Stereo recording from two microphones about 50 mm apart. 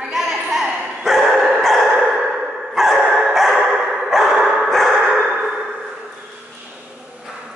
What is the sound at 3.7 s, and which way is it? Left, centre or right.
Dog, centre.